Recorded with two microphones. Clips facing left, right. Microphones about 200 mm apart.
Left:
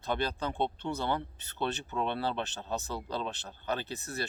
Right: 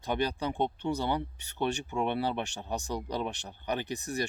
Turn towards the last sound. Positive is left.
turn(degrees=-15)  # may be behind; listen again after turning